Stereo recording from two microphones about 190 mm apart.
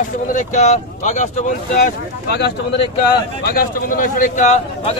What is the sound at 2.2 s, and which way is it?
Speech, 60° left (ahead or behind).